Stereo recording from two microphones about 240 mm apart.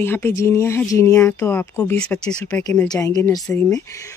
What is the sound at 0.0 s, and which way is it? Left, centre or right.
Speech, centre.